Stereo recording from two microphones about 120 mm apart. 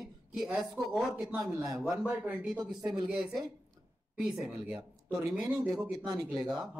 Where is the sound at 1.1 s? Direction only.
10° right (ahead or behind).